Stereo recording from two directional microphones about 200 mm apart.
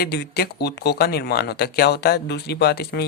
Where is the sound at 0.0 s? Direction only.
55° left (ahead or behind).